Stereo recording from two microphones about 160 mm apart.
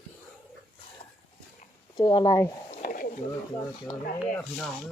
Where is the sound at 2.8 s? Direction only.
60° left (ahead or behind).